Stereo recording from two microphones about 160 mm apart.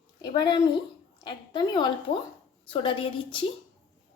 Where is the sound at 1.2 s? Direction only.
30° left (ahead or behind).